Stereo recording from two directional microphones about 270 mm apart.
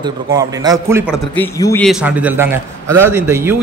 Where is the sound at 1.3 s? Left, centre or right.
Centre.